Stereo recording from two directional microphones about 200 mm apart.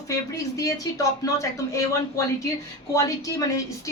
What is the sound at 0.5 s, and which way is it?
Speech, 15° left (ahead or behind).